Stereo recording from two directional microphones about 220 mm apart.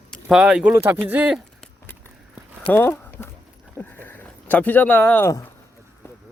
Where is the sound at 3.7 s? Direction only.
10° left (ahead or behind).